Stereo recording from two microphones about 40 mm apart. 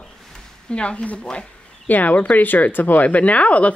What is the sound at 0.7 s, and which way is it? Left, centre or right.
Speech, left.